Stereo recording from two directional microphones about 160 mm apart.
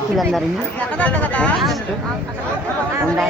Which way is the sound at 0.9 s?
10° left (ahead or behind).